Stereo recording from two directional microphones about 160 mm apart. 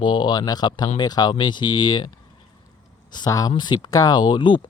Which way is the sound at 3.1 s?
25° left (ahead or behind).